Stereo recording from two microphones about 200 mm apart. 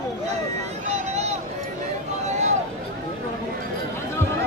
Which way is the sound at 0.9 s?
35° right (ahead or behind).